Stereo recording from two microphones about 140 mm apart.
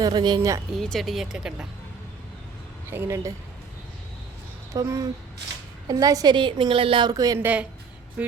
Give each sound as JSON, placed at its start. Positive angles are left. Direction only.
{"t": 0.0, "sound": "a woman's voice", "side_deg": -30}
{"t": 0.7, "sound": "speech", "side_deg": 0}
{"t": 2.9, "sound": "a woman's voice", "side_deg": -15}
{"t": 4.7, "sound": "a woman's voice", "side_deg": -25}
{"t": 7.3, "sound": "a woman's voice", "side_deg": -10}